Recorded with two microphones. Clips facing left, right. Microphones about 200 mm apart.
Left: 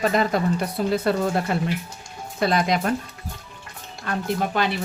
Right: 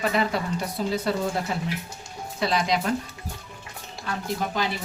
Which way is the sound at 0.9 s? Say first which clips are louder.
Left 5 dB; 60° left (ahead or behind).